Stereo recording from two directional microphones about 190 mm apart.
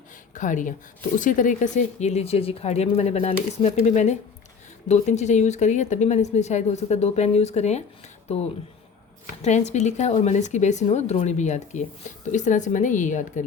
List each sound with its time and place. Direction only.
0.3 s speech: 40° left (ahead or behind)
9.4 s speech: 35° left (ahead or behind)